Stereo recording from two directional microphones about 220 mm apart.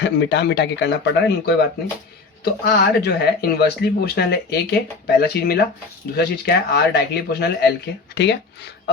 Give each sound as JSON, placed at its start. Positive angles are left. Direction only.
{"t": 0.0, "sound": "speech", "side_deg": 50}